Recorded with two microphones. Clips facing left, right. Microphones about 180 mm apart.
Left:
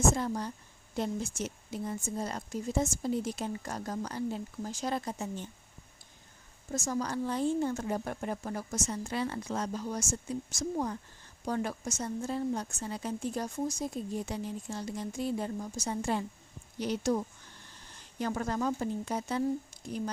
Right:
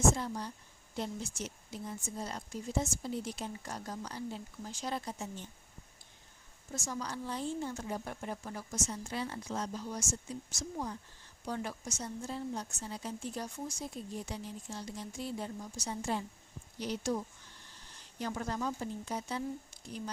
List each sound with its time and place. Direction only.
0.1 s a woman's voice: 50° left (ahead or behind)
6.7 s a woman's voice: 45° left (ahead or behind)